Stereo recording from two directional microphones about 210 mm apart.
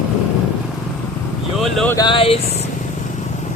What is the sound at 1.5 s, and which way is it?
Speech, centre (ahead or behind).